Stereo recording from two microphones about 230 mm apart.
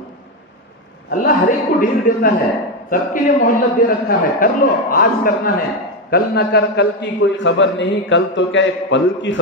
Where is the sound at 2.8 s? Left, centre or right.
Left.